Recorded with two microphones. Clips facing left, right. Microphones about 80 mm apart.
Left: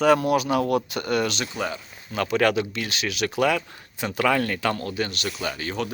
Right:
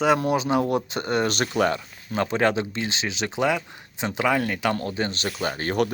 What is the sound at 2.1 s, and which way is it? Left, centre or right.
Speech, right.